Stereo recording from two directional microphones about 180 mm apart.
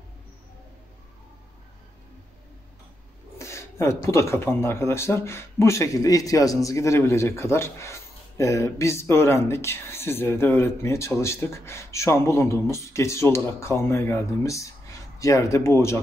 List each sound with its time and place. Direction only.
3.3 s speech: 15° left (ahead or behind)